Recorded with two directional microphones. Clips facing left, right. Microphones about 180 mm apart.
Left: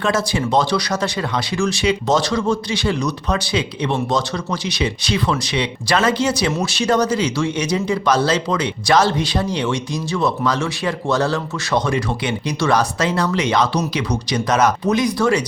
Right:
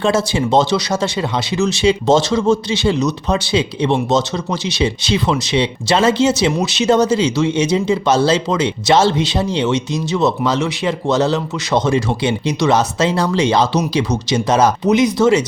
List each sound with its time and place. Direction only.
0.0 s speech: 25° right (ahead or behind)